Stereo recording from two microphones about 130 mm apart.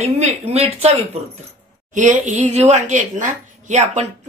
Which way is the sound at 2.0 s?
70° right (ahead or behind).